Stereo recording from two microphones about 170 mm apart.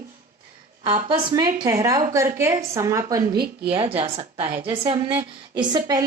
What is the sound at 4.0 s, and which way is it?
A woman's voice, 35° right (ahead or behind).